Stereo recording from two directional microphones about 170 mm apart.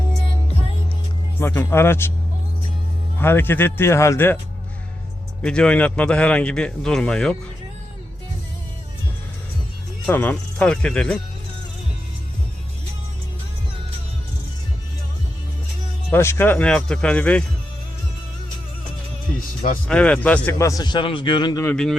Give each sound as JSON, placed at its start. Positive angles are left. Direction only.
{"t": 1.4, "sound": "speech", "side_deg": 15}
{"t": 3.2, "sound": "speech", "side_deg": 15}
{"t": 5.4, "sound": "a man's voice", "side_deg": 5}
{"t": 10.1, "sound": "speech", "side_deg": 10}
{"t": 16.1, "sound": "speech", "side_deg": 15}
{"t": 19.9, "sound": "speech", "side_deg": 5}